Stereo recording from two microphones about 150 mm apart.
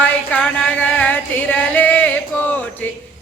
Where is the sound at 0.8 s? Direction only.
10° left (ahead or behind).